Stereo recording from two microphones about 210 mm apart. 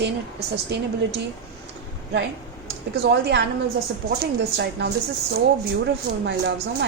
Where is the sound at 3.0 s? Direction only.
55° right (ahead or behind).